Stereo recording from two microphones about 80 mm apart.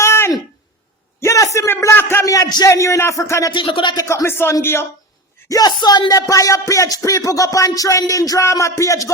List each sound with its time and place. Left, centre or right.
0.0 s a sound: left
2.6 s speech: left
3.5 s speech: left
3.9 s speech: left
5.5 s speech: left
6.1 s speech: left